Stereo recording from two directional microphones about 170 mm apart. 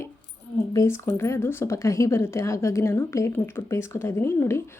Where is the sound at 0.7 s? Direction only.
15° left (ahead or behind).